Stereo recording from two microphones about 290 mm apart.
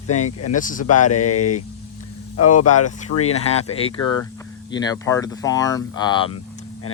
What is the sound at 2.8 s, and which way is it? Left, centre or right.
Speech, left.